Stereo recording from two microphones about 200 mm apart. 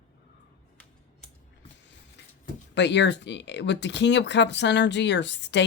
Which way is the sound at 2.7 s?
60° left (ahead or behind).